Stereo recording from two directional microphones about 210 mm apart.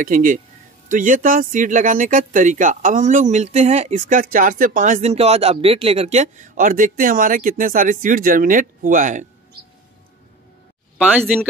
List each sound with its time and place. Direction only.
0.0 s speech: 40° right (ahead or behind)
11.0 s speech: 5° right (ahead or behind)